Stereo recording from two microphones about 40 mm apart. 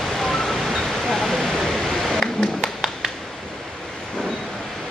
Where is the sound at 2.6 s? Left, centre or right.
Centre.